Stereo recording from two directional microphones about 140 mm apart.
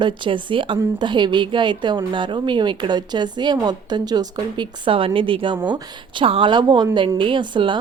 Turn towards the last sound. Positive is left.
turn(degrees=-35)  # may be behind; listen again after turning